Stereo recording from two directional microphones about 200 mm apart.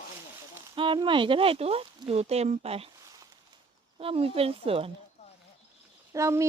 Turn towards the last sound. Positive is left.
turn(degrees=-15)  # may be behind; listen again after turning